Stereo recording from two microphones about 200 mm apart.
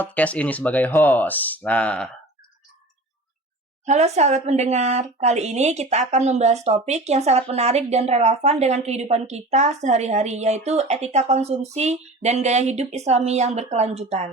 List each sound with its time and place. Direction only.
0.0 s speech: 5° left (ahead or behind)
3.8 s speech: 35° right (ahead or behind)